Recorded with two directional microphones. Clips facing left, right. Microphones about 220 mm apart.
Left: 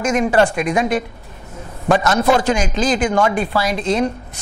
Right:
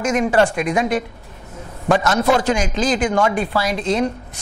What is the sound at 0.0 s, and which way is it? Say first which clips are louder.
A woman's voice: left 1 dB; 15° left (ahead or behind).